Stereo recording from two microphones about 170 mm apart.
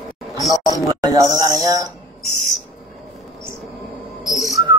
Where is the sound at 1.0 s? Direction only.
20° right (ahead or behind).